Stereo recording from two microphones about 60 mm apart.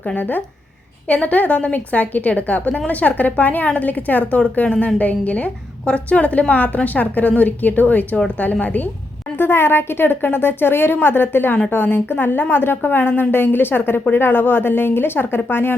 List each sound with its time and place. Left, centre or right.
0.0 s a woman's voice: left
9.3 s a woman's voice: left